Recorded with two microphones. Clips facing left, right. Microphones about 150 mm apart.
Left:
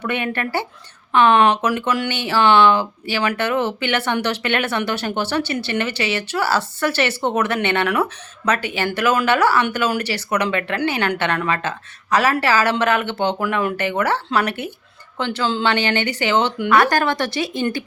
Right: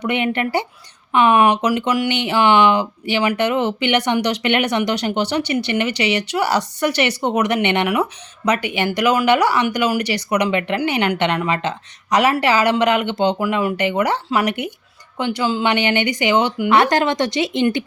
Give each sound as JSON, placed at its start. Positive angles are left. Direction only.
{"t": 0.0, "sound": "speech", "side_deg": -15}
{"t": 16.6, "sound": "speech", "side_deg": -20}